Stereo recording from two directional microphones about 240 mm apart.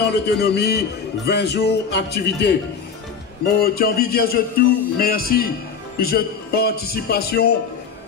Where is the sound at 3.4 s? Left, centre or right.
Left.